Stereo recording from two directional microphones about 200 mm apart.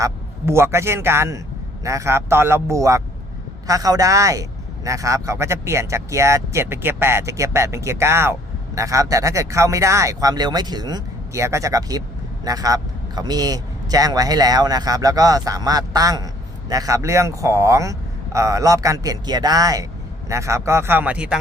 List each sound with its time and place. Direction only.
0.0 s a man's voice: 15° right (ahead or behind)